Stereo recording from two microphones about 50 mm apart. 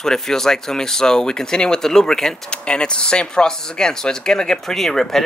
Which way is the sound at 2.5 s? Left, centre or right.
Left.